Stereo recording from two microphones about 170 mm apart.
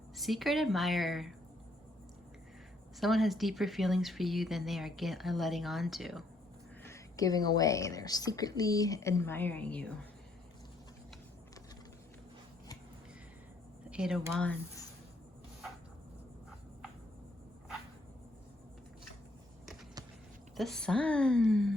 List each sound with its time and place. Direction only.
0.2 s speech: centre (ahead or behind)
3.0 s speech: centre (ahead or behind)
6.8 s a woman's voice: 20° left (ahead or behind)
13.9 s speech: 5° right (ahead or behind)
20.6 s speech: 5° left (ahead or behind)